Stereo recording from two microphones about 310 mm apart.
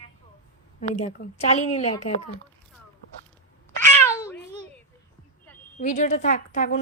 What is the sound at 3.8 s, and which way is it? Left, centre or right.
Meow, centre.